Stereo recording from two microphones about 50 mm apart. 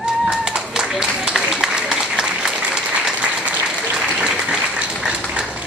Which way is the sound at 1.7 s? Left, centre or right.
Centre.